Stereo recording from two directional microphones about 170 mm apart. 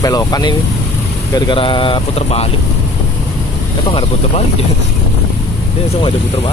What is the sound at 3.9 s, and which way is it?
Speech, 30° left (ahead or behind).